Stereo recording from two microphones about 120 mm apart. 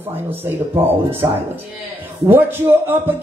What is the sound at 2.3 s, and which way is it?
Speech, 20° right (ahead or behind).